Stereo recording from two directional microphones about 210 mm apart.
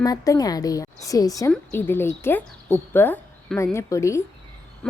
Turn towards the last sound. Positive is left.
turn(degrees=15)  # may be behind; listen again after turning